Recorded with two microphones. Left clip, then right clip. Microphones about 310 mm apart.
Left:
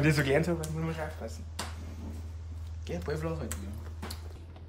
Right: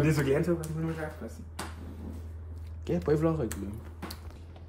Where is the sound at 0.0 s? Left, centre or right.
Centre.